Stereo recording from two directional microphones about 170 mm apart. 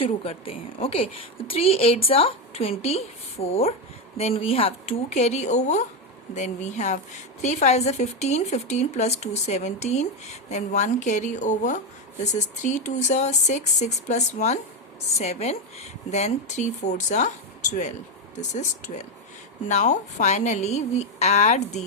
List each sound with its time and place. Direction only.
0.0 s a woman's voice: 35° left (ahead or behind)